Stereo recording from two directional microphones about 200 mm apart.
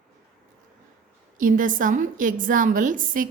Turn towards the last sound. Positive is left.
turn(degrees=-40)  # may be behind; listen again after turning